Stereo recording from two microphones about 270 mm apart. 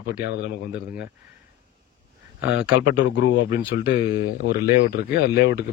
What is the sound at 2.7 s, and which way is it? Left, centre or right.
Speech, left.